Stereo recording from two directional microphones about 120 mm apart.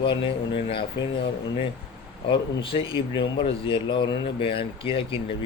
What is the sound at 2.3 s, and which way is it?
A man's voice, 45° left (ahead or behind).